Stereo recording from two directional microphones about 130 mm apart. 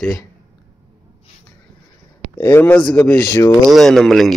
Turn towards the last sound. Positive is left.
turn(degrees=0)  # may be behind; listen again after turning